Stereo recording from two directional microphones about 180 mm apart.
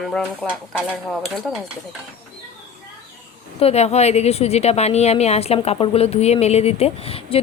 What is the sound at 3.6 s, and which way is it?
A woman's voice, 35° left (ahead or behind).